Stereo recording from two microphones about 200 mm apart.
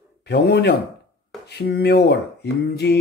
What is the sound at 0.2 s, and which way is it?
Speech, 55° left (ahead or behind).